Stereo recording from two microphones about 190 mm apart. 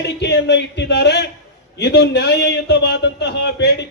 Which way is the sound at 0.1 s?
65° left (ahead or behind).